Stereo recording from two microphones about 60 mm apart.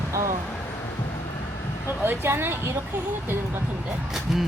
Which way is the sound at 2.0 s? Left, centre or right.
Right.